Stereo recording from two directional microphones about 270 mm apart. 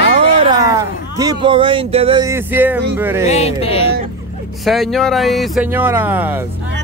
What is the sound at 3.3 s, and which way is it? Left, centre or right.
Speech, left.